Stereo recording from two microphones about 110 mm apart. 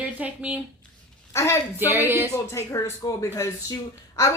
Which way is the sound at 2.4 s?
25° left (ahead or behind).